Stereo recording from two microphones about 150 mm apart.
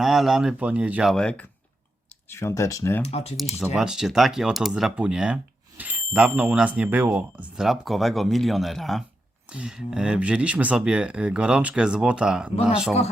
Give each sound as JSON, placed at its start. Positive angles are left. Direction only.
{"t": 0.0, "sound": "speech", "side_deg": 0}
{"t": 1.1, "sound": "speech", "side_deg": 5}
{"t": 2.3, "sound": "speech", "side_deg": 20}
{"t": 3.0, "sound": "speech", "side_deg": 45}
{"t": 3.8, "sound": "speech", "side_deg": -5}